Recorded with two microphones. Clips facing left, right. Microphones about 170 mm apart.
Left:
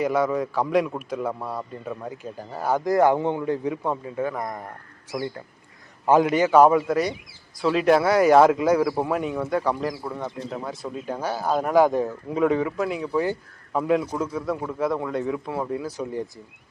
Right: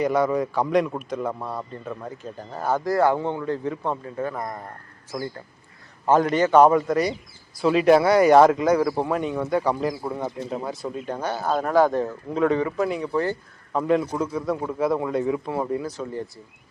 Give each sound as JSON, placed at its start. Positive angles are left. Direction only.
{"t": 0.0, "sound": "a man's voice", "side_deg": 5}
{"t": 6.1, "sound": "speech", "side_deg": 10}
{"t": 10.0, "sound": "speech", "side_deg": -10}
{"t": 11.0, "sound": "a man's voice", "side_deg": 5}
{"t": 12.0, "sound": "speech", "side_deg": 5}
{"t": 16.0, "sound": "a man's voice", "side_deg": 15}